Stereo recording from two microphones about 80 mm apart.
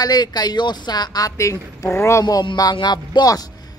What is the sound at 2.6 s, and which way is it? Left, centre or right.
Speech, left.